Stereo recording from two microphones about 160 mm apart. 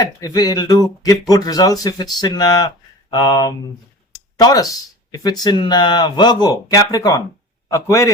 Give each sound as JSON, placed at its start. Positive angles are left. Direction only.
{"t": 0.0, "sound": "speech", "side_deg": 25}
{"t": 4.1, "sound": "a sound", "side_deg": 25}
{"t": 5.1, "sound": "speech", "side_deg": 25}